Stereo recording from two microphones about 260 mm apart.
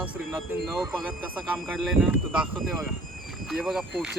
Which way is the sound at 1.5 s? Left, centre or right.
Centre.